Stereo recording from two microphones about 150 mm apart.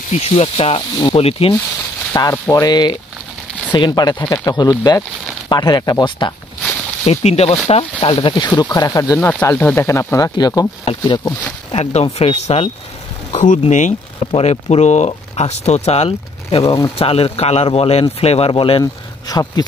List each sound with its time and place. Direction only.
0.1 s speech: 45° left (ahead or behind)
2.1 s speech: 20° left (ahead or behind)
7.1 s speech: 45° left (ahead or behind)
8.5 s speech: 25° left (ahead or behind)
11.7 s speech: 45° left (ahead or behind); by 19.6 s 25° left (ahead or behind)